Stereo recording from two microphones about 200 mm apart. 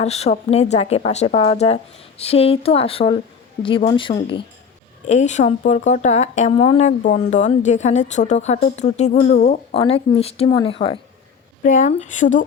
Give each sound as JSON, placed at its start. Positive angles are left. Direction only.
{"t": 0.0, "sound": "a woman's voice", "side_deg": 30}
{"t": 5.0, "sound": "a woman's voice", "side_deg": 35}
{"t": 11.6, "sound": "a woman's voice", "side_deg": 40}